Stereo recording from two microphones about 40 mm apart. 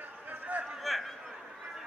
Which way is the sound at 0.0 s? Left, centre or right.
Right.